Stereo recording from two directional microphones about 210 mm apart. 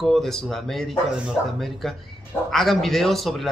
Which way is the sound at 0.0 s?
Centre (ahead or behind).